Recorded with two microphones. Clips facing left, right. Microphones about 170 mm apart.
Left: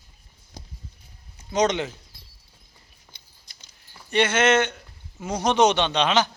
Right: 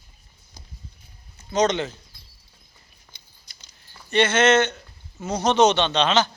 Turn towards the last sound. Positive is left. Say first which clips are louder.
# right 1 dB
turn(degrees=10)  # may be behind; listen again after turning